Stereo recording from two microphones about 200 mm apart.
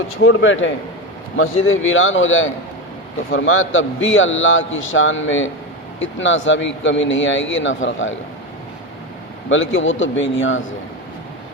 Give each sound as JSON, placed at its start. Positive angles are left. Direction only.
{"t": 0.3, "sound": "a man's voice", "side_deg": 70}
{"t": 1.4, "sound": "a man's voice", "side_deg": 85}
{"t": 9.5, "sound": "a man's voice", "side_deg": 75}